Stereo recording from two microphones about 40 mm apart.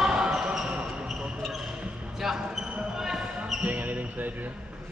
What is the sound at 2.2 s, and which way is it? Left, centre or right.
Basketball bounce, centre.